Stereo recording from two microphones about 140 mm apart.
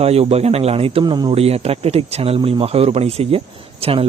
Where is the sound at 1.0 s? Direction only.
30° right (ahead or behind).